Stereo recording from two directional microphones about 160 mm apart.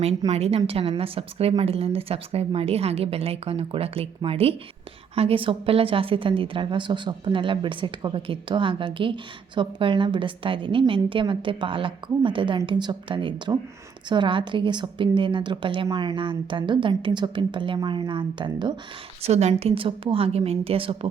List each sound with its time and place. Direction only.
0.3 s a woman's voice: 40° right (ahead or behind)
19.2 s a woman's voice: 45° right (ahead or behind)